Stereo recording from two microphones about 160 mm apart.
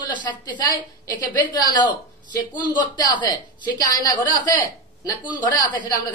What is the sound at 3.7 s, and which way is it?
Speech, 25° left (ahead or behind).